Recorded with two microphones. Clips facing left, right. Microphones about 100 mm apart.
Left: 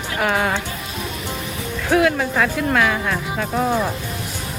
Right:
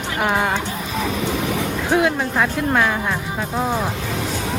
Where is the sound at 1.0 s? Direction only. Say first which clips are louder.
Right 8 dB; 85° right.